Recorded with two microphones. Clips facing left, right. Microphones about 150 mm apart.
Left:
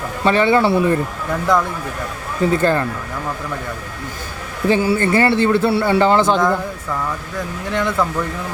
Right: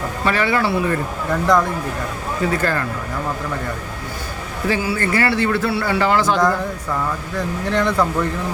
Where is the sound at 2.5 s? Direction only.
25° left (ahead or behind).